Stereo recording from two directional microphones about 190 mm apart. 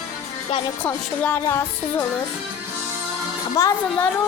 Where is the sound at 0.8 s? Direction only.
10° left (ahead or behind).